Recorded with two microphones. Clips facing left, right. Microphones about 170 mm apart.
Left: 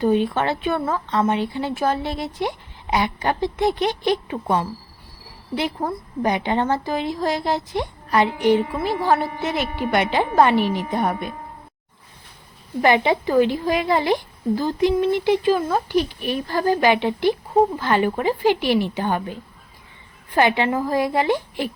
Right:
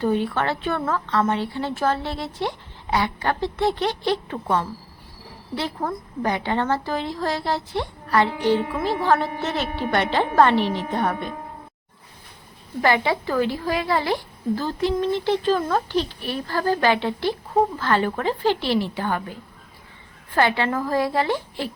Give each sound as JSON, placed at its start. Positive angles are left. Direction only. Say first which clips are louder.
{"t": 0.0, "sound": "a woman's voice", "louder": "left 3 dB", "side_deg": 20}
{"t": 12.8, "sound": "a woman's voice", "louder": "left 3 dB", "side_deg": 20}